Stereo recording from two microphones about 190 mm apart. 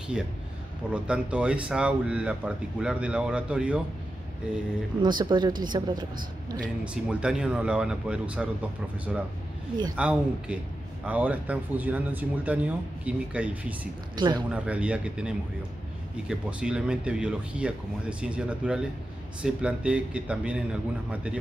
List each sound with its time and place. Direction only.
0.9 s speech: 5° right (ahead or behind)
5.0 s speech: 25° right (ahead or behind)
6.8 s speech: 5° right (ahead or behind)
14.1 s speech: 20° right (ahead or behind)
14.5 s speech: 5° right (ahead or behind)